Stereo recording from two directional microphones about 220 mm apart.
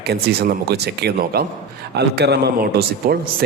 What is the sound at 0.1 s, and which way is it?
A man's voice, 45° right (ahead or behind).